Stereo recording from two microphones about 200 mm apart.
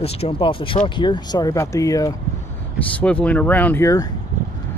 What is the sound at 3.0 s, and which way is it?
Speech, 5° left (ahead or behind).